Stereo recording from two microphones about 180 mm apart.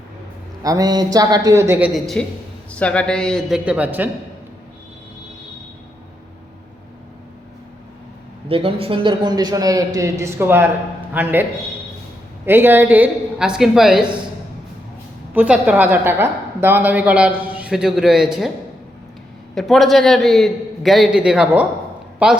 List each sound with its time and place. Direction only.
0.6 s a man's voice: 20° right (ahead or behind)
1.9 s a man's voice: centre (ahead or behind)
3.7 s a woman's voice: 10° right (ahead or behind)
8.4 s a man's voice: 30° right (ahead or behind); by 11.4 s 10° right (ahead or behind)
12.5 s a woman's voice: 10° right (ahead or behind)
15.3 s a woman's voice: 10° right (ahead or behind)
19.5 s a man's voice: centre (ahead or behind)